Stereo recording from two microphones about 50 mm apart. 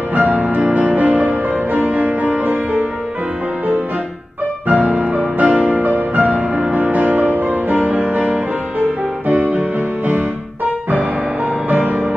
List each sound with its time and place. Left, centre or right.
0.1 s music: right
4.6 s music: right
11.7 s music: right